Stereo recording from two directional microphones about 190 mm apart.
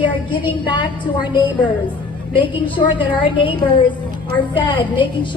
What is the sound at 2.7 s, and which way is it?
A woman's voice, 25° left (ahead or behind).